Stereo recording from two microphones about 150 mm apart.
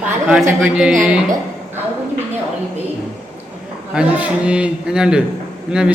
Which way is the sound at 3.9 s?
10° right (ahead or behind).